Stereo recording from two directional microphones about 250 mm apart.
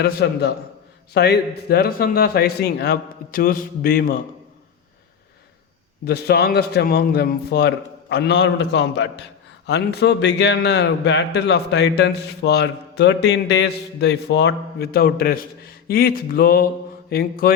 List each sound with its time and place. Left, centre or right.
0.0 s a man's voice: left
6.1 s a man's voice: left